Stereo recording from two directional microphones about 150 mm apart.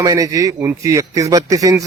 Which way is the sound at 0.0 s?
20° right (ahead or behind).